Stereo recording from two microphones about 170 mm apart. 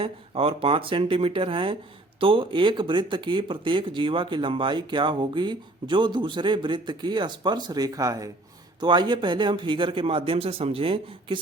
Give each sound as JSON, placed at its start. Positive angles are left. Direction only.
{"t": 0.0, "sound": "speech", "side_deg": -35}